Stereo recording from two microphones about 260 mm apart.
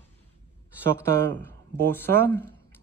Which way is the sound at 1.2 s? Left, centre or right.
Centre.